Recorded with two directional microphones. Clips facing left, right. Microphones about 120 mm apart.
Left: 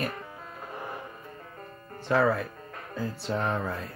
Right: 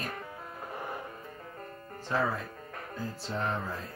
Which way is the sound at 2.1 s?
70° left (ahead or behind).